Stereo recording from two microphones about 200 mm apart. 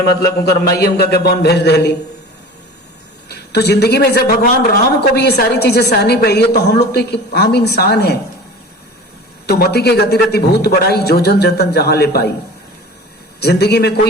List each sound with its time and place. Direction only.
0.2 s a woman's voice: 55° left (ahead or behind)
3.2 s a man's voice: 55° left (ahead or behind)
9.5 s a woman's voice: 50° left (ahead or behind)
13.4 s a woman's voice: 55° left (ahead or behind)